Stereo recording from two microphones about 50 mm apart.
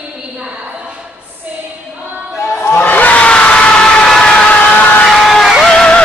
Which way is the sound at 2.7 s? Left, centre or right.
Left.